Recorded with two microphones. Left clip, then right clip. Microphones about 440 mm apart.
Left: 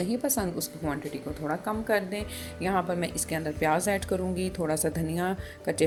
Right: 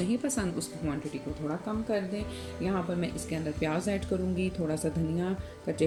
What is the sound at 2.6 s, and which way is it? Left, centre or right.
Speech, centre.